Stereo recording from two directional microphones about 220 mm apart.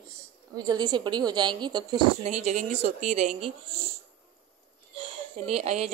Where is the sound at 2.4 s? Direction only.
30° right (ahead or behind).